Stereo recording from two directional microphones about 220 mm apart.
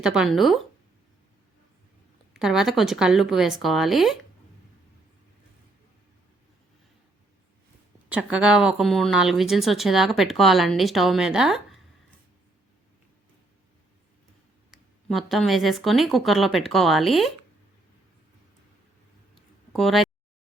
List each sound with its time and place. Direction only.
0.0 s speech: 5° right (ahead or behind)
2.3 s speech: centre (ahead or behind)
8.1 s speech: 5° right (ahead or behind)
14.7 s speech: centre (ahead or behind)
19.3 s a sound: centre (ahead or behind)